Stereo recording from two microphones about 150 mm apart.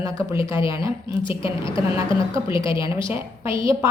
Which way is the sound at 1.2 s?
35° left (ahead or behind).